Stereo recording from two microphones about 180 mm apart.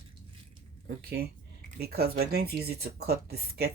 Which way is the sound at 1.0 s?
55° right (ahead or behind).